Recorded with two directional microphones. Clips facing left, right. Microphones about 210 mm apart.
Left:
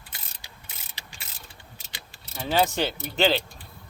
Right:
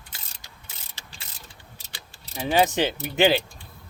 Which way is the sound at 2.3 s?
15° right (ahead or behind).